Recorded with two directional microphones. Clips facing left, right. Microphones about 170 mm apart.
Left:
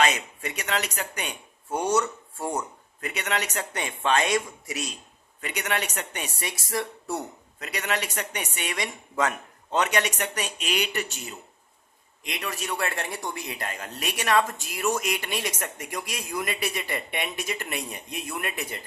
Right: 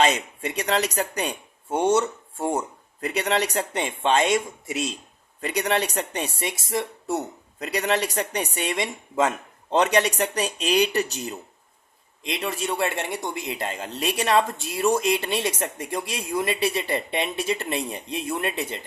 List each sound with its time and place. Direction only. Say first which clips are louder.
0.0 s a woman's voice: right 3 dB; 30° right (ahead or behind)
7.6 s a woman's voice: right 6 dB; 35° right (ahead or behind)
12.2 s speech: right 5 dB; 25° right (ahead or behind)